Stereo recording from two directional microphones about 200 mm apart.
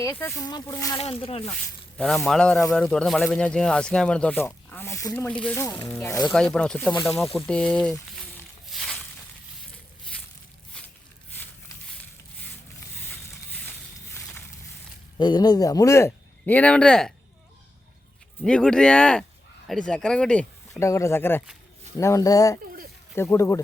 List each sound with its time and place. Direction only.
0.0 s speech: 15° left (ahead or behind)
2.0 s speech: centre (ahead or behind)
6.2 s speech: 5° left (ahead or behind)
8.7 s a sound: centre (ahead or behind)
13.7 s a sound: 10° left (ahead or behind)
15.2 s speech: 20° left (ahead or behind); by 17.1 s 5° left (ahead or behind)
18.4 s speech: 5° left (ahead or behind)